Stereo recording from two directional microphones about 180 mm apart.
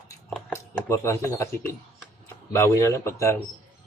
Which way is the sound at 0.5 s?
15° left (ahead or behind).